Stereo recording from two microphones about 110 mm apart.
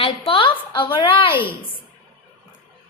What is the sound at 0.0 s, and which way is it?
A woman's voice, 50° left (ahead or behind).